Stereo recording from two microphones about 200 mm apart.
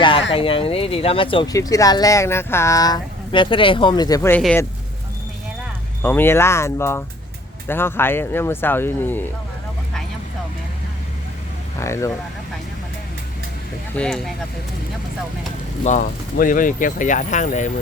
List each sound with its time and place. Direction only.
0.3 s speech: 25° left (ahead or behind); by 4.6 s 10° left (ahead or behind)
6.0 s speech: 10° left (ahead or behind)
11.8 s speech: 15° left (ahead or behind)
13.9 s speech: 5° left (ahead or behind)
15.8 s speech: 35° left (ahead or behind)